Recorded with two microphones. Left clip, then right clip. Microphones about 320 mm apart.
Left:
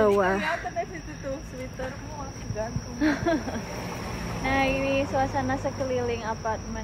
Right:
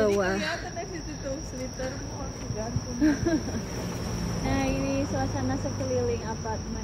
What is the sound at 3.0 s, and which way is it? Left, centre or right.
Speech, centre.